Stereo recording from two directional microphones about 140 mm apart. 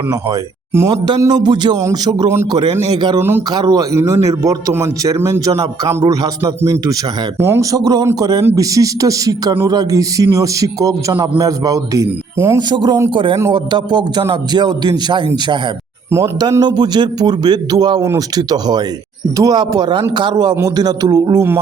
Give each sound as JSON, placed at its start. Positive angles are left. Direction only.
{"t": 0.1, "sound": "a man's voice", "side_deg": -20}
{"t": 3.2, "sound": "speech", "side_deg": -15}
{"t": 3.5, "sound": "a man's voice", "side_deg": -30}
{"t": 12.5, "sound": "a man's voice", "side_deg": -30}